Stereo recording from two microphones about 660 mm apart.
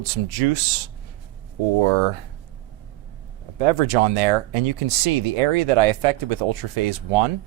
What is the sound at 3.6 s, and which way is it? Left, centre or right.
Speech, right.